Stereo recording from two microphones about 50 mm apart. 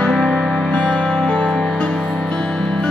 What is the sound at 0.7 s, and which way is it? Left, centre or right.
Music, left.